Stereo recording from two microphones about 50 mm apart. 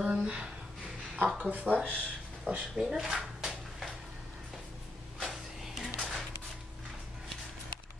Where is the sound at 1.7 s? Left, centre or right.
Centre.